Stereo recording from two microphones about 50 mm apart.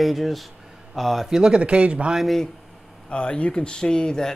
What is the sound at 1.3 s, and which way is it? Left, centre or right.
Speech, centre.